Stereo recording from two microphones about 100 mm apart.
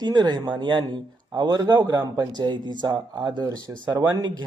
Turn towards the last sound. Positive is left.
turn(degrees=-40)  # may be behind; listen again after turning